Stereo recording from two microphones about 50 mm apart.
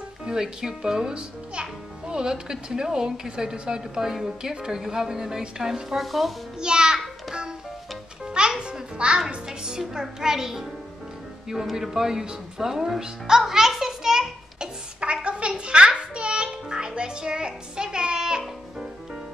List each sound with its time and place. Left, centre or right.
0.3 s a child's voice: centre
6.6 s music: centre
8.4 s a sound: centre
9.5 s a child's voice: centre
11.7 s music: centre